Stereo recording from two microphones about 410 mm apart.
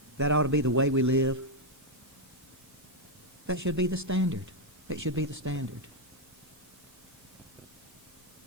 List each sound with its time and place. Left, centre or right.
0.2 s a man's voice: right
3.4 s a man's voice: right